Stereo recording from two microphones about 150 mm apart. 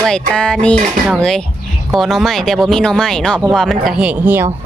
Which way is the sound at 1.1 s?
5° left (ahead or behind).